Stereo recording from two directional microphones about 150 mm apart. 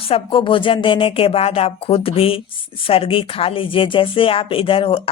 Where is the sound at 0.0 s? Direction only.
40° left (ahead or behind).